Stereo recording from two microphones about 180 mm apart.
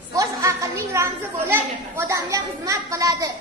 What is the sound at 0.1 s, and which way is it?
A woman's voice, 15° right (ahead or behind).